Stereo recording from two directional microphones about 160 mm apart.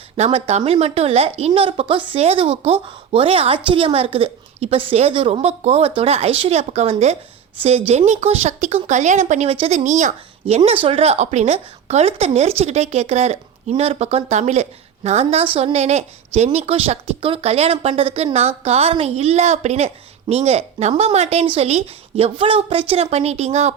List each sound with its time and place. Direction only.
0.2 s a woman's voice: 40° right (ahead or behind)